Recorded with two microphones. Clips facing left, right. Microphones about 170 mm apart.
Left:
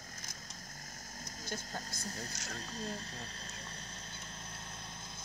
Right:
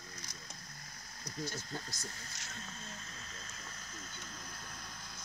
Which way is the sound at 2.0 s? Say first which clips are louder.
Left 6 dB; 40° left (ahead or behind).